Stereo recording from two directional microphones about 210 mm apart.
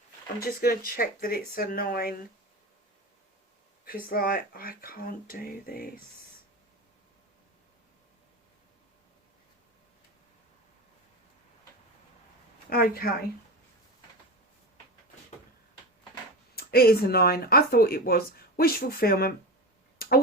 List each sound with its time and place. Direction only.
0.3 s speech: 45° left (ahead or behind)
3.8 s speech: 45° left (ahead or behind)
12.7 s speech: 45° left (ahead or behind)
16.6 s speech: 45° left (ahead or behind)
20.0 s tick-tock: 45° left (ahead or behind)